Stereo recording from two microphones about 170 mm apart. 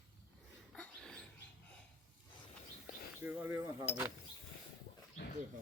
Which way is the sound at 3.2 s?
10° right (ahead or behind).